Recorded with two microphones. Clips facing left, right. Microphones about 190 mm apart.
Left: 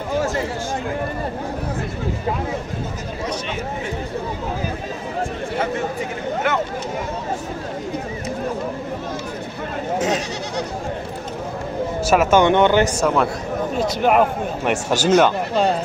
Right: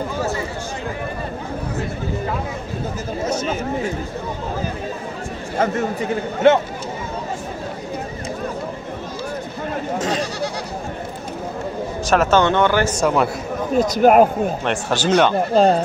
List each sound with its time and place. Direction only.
6.4 s a sound: 25° right (ahead or behind)
9.9 s goat: 10° left (ahead or behind)
12.1 s speech: 10° left (ahead or behind)
13.0 s a man's voice: 5° right (ahead or behind)
13.7 s speech: 40° right (ahead or behind)
14.6 s speech: 10° left (ahead or behind)